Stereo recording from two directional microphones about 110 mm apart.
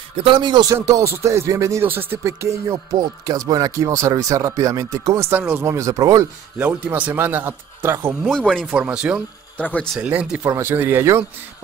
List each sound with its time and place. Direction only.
0.2 s speech: 45° right (ahead or behind)
0.7 s speech: 30° right (ahead or behind)
6.6 s speech: 15° right (ahead or behind)
8.3 s speech: 5° left (ahead or behind)
8.6 s speech: 10° right (ahead or behind)
9.6 s speech: 15° left (ahead or behind)
9.9 s speech: 15° right (ahead or behind)